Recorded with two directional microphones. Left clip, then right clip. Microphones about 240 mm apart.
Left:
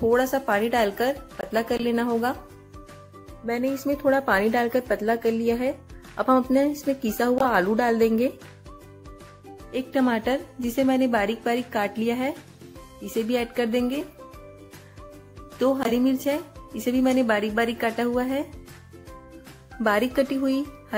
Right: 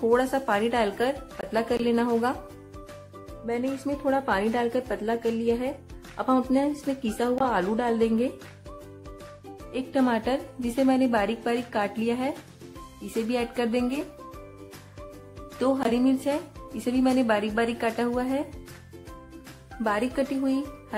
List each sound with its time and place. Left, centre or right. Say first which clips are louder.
0.1 s a woman's voice: left 2 dB; centre
3.4 s a woman's voice: left 3 dB; centre
9.7 s a woman's voice: left 1 dB; centre
15.6 s a woman's voice: left 2 dB; centre
19.8 s a woman's voice: left 4 dB; centre